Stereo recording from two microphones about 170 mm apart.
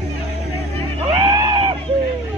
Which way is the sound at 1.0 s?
25° right (ahead or behind).